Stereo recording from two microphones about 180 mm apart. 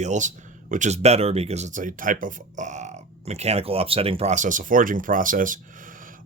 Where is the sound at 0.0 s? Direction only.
40° right (ahead or behind).